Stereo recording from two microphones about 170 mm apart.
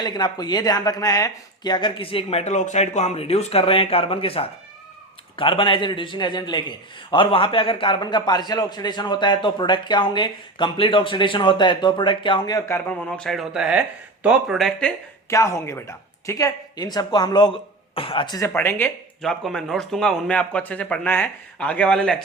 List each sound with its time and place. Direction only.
0.0 s a man's voice: 25° left (ahead or behind)
13.1 s speech: 5° left (ahead or behind)
15.3 s a man's voice: 20° left (ahead or behind)
18.3 s speech: 15° left (ahead or behind)
19.2 s speech: 5° left (ahead or behind)